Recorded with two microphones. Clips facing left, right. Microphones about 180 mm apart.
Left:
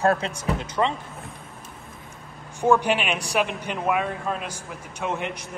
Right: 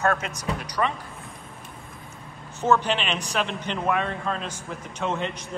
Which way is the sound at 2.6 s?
10° left (ahead or behind).